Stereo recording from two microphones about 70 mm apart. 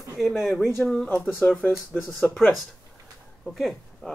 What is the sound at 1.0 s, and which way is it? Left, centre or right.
Speech, left.